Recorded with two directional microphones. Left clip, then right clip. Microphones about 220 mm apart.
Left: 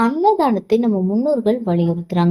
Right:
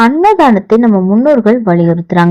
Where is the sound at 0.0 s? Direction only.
30° right (ahead or behind).